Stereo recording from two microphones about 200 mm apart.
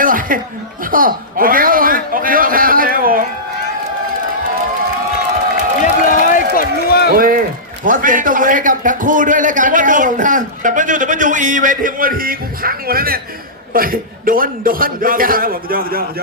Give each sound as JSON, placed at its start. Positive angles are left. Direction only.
{"t": 0.0, "sound": "chuckle", "side_deg": -45}
{"t": 0.9, "sound": "a sound", "side_deg": -45}
{"t": 5.8, "sound": "run", "side_deg": 40}
{"t": 7.2, "sound": "a man's voice", "side_deg": -45}